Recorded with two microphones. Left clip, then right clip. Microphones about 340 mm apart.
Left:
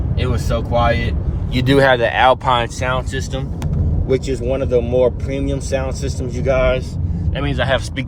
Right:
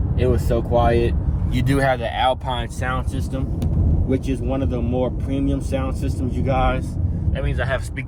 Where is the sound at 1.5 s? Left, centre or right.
Centre.